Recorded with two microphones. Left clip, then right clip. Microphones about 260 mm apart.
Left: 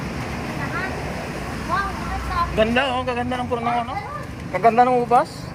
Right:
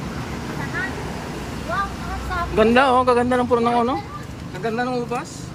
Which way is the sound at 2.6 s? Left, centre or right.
Centre.